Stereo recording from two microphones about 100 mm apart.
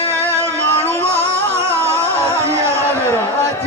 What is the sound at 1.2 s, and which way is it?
Music, 25° right (ahead or behind).